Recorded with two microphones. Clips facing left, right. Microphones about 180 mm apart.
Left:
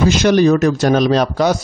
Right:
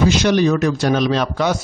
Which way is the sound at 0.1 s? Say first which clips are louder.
Left 4 dB; 45° left (ahead or behind).